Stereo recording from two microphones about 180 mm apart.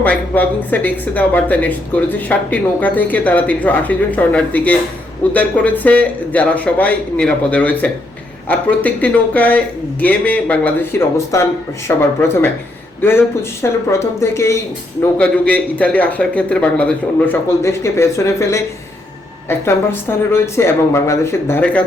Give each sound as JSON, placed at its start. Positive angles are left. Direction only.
{"t": 0.0, "sound": "speech", "side_deg": 10}
{"t": 11.3, "sound": "speech", "side_deg": 15}